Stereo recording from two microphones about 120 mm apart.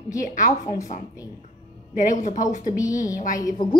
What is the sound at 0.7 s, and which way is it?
A woman's voice, 90° left.